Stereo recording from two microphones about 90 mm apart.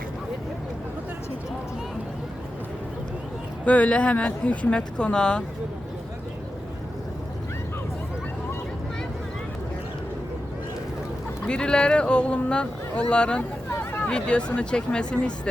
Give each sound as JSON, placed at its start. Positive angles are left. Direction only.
{"t": 3.7, "sound": "speech", "side_deg": 15}
{"t": 11.4, "sound": "speech", "side_deg": 10}
{"t": 13.7, "sound": "a sound", "side_deg": 25}
{"t": 14.1, "sound": "speech", "side_deg": 10}